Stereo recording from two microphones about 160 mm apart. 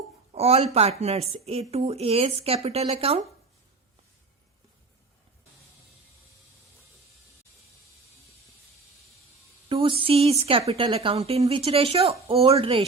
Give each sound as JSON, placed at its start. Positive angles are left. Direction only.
{"t": 0.3, "sound": "speech", "side_deg": -40}
{"t": 9.6, "sound": "a woman's voice", "side_deg": -30}